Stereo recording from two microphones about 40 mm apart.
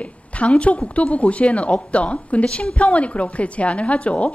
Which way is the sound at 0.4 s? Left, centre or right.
Left.